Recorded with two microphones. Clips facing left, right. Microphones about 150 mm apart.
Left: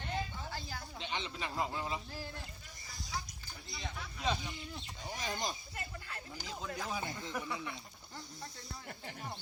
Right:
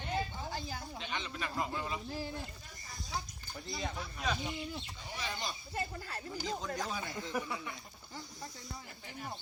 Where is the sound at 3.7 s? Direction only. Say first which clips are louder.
Right 6 dB; 40° right (ahead or behind).